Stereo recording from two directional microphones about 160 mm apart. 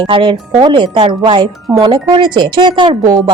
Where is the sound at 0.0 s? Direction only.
30° right (ahead or behind).